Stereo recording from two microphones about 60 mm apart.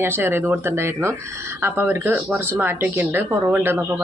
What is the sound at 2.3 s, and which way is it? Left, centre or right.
Speech, right.